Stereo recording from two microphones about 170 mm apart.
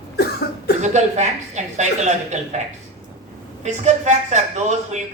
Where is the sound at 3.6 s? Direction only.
45° right (ahead or behind).